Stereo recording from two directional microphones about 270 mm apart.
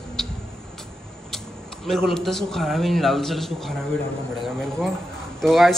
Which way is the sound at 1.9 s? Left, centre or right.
Centre.